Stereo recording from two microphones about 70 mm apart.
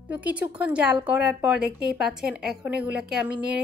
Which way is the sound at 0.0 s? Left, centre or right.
Right.